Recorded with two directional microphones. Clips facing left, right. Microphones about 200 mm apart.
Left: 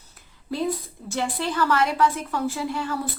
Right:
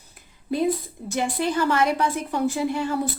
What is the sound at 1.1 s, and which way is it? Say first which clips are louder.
A woman's voice: right 2 dB; 15° right (ahead or behind).